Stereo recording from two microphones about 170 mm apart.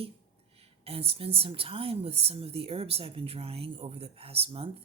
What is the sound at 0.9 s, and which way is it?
Speech, 35° right (ahead or behind).